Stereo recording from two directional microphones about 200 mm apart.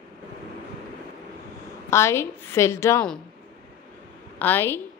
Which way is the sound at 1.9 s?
15° left (ahead or behind).